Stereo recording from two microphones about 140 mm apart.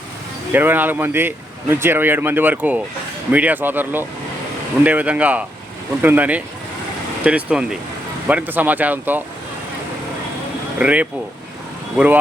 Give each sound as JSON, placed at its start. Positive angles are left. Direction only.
{"t": 0.5, "sound": "speech", "side_deg": -15}
{"t": 10.8, "sound": "speech", "side_deg": -10}